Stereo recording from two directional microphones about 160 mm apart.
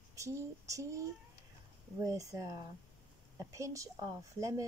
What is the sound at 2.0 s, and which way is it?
Speech, 20° right (ahead or behind).